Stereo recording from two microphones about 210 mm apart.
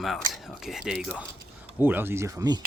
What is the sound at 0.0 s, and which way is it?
Speech, centre (ahead or behind).